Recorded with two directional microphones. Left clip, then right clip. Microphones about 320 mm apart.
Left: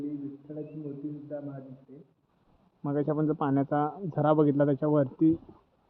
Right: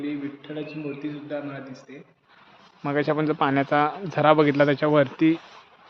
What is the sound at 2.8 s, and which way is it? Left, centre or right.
Speech, centre.